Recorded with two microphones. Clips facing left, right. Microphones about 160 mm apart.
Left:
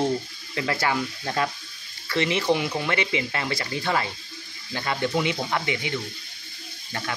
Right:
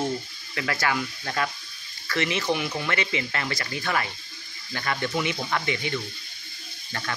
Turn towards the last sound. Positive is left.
turn(degrees=15)  # may be behind; listen again after turning